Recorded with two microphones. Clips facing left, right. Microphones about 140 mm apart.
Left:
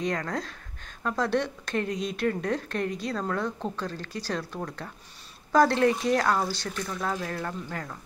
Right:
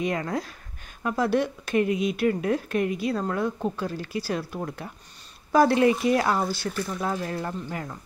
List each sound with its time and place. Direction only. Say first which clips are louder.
0.0 s speech: right 2 dB; 10° right (ahead or behind)